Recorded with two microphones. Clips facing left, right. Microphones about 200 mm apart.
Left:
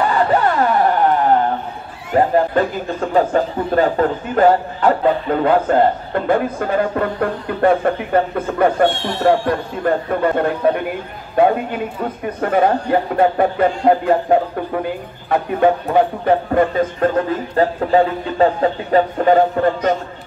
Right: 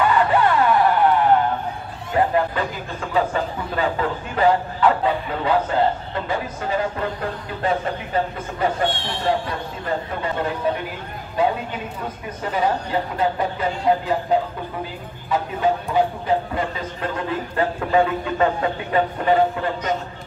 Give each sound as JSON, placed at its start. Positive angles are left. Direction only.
{"t": 0.0, "sound": "a sound", "side_deg": 35}
{"t": 2.1, "sound": "a man's voice", "side_deg": 40}
{"t": 17.6, "sound": "speech", "side_deg": 35}